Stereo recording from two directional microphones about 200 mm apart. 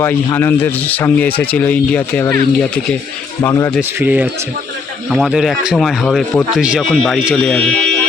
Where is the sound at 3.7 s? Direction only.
5° right (ahead or behind).